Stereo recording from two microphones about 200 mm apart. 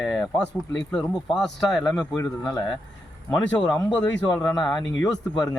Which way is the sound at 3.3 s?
5° left (ahead or behind).